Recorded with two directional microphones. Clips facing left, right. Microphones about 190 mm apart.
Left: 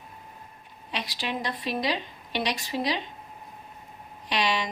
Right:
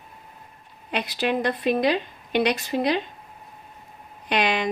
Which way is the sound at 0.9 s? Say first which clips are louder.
Right 8 dB; 55° right (ahead or behind).